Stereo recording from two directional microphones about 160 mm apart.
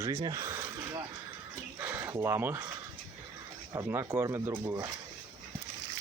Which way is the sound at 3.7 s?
20° right (ahead or behind).